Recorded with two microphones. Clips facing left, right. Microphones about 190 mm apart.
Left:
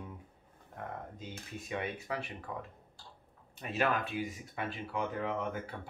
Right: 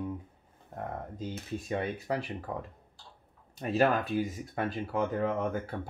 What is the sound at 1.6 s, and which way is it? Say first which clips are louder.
Speech: right 5 dB; 40° right (ahead or behind).